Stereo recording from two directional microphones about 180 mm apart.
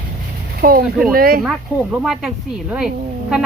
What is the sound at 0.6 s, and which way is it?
Speech, 55° right (ahead or behind).